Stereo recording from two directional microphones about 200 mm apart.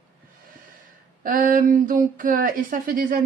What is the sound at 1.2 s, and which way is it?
Speech, 45° right (ahead or behind).